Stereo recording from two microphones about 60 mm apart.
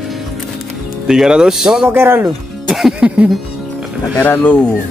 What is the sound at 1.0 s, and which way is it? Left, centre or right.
Speech, centre.